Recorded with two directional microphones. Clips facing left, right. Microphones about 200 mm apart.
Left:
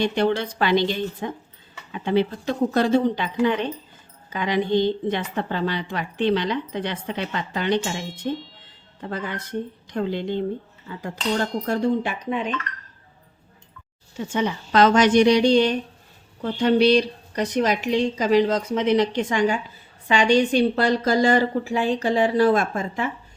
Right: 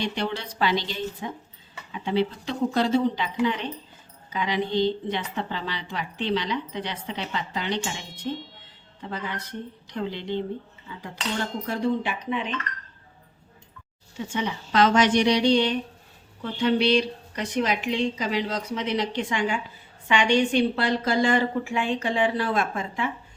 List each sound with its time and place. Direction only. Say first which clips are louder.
0.0 s a woman's voice: left 7 dB; 50° left (ahead or behind)
14.3 s a woman's voice: left 4 dB; 45° left (ahead or behind)